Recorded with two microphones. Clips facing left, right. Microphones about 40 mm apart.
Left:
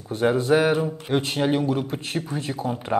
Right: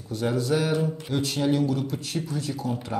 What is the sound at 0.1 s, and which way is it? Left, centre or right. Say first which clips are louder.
Speech: left 5 dB; left.